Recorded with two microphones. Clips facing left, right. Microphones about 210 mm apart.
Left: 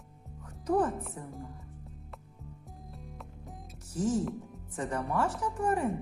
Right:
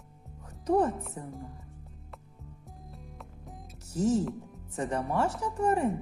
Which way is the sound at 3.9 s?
25° right (ahead or behind).